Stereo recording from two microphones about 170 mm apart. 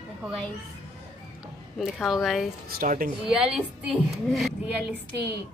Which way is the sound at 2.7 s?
55° right (ahead or behind).